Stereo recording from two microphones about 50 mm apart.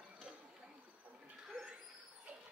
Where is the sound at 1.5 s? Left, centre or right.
Centre.